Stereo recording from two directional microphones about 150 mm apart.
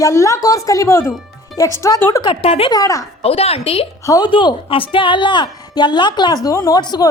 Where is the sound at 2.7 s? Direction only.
20° left (ahead or behind).